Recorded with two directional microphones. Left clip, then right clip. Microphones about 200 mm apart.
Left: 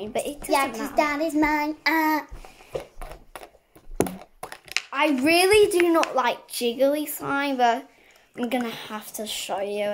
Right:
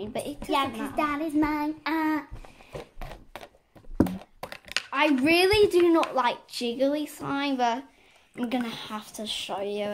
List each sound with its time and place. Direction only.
0.0 s speech: 5° right (ahead or behind)
0.9 s child singing: 10° left (ahead or behind); by 2.2 s 25° left (ahead or behind)
3.0 s a sound: 15° right (ahead or behind)
5.0 s speech: centre (ahead or behind)